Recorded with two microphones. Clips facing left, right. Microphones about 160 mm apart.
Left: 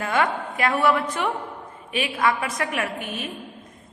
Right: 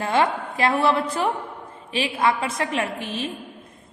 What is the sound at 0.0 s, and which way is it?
A woman's voice, 30° right (ahead or behind).